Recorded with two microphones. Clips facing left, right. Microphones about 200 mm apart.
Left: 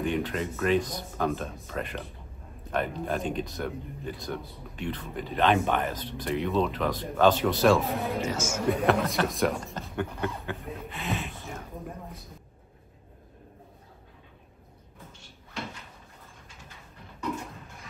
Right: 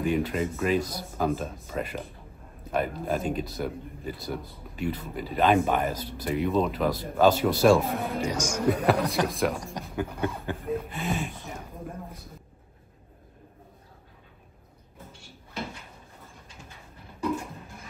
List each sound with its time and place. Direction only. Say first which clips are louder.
0.0 s speech: right 3 dB; 5° right (ahead or behind)
8.2 s music: right 1 dB; 15° right (ahead or behind)
8.8 s speech: right 1 dB; centre (ahead or behind)
9.8 s music: right 2 dB; 15° right (ahead or behind)
11.0 s speech: right 3 dB; 50° right (ahead or behind)